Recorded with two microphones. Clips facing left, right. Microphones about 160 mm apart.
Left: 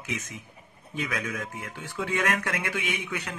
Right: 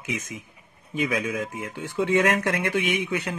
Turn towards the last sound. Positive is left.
turn(degrees=-20)  # may be behind; listen again after turning